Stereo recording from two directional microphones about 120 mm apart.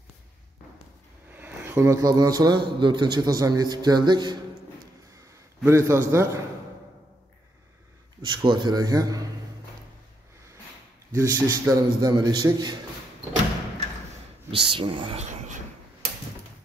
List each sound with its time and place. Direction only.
1.3 s a man's voice: 15° right (ahead or behind); by 4.4 s 40° right (ahead or behind)
5.7 s a man's voice: 25° right (ahead or behind)
8.3 s a man's voice: 40° right (ahead or behind)
11.1 s a man's voice: 25° right (ahead or behind)
14.5 s speech: 45° right (ahead or behind)